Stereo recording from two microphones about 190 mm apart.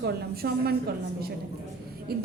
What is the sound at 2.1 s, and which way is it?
Speech, 55° right (ahead or behind).